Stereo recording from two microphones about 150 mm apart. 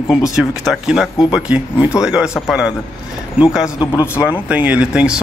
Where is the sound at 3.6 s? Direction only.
25° left (ahead or behind).